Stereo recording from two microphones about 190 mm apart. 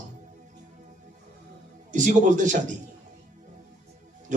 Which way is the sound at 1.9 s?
40° right (ahead or behind).